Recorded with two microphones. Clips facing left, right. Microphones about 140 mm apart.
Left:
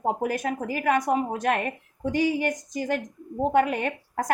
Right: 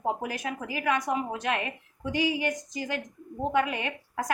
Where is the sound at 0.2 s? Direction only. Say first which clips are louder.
Left 6 dB; 45° left (ahead or behind).